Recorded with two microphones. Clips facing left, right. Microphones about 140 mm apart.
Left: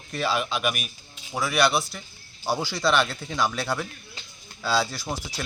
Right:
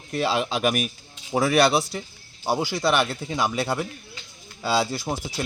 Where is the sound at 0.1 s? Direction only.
25° right (ahead or behind).